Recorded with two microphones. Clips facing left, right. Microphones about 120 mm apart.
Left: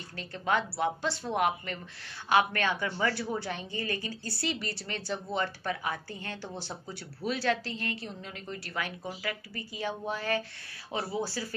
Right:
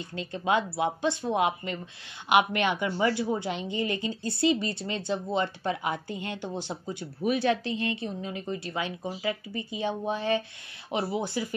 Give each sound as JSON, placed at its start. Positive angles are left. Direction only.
{"t": 0.1, "sound": "a woman's voice", "side_deg": -20}